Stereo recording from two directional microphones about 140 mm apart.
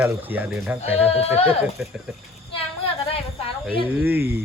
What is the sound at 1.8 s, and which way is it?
Speech, centre (ahead or behind).